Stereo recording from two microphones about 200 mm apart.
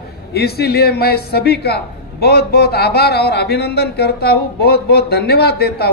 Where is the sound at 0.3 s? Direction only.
50° left (ahead or behind).